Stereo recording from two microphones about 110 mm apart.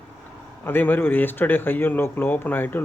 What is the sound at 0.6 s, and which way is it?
Speech, 20° left (ahead or behind).